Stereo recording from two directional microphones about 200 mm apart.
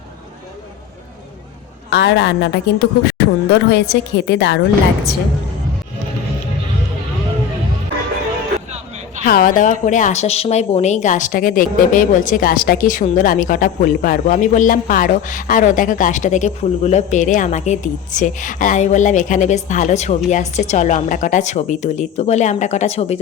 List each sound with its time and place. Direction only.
1.9 s a woman's voice: 60° left (ahead or behind)
9.2 s a woman's voice: 45° left (ahead or behind)